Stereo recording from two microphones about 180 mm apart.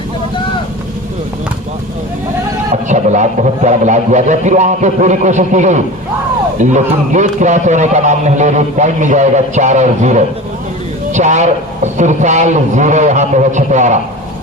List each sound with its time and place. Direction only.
2.9 s speech: 40° right (ahead or behind)